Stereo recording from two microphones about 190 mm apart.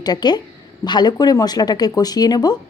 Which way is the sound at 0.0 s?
20° left (ahead or behind).